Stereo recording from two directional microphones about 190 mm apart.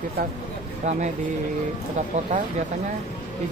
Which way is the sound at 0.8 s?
40° right (ahead or behind).